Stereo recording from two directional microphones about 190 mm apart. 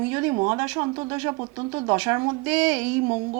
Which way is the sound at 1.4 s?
25° right (ahead or behind).